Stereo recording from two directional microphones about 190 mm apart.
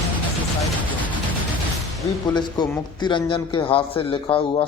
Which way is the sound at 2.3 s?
20° left (ahead or behind).